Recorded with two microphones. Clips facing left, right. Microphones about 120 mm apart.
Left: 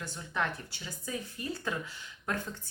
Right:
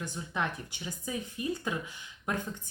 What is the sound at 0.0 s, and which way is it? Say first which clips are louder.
Speech: right 1 dB; 15° right (ahead or behind).